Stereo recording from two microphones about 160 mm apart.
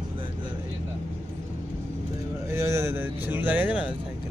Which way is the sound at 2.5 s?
15° right (ahead or behind).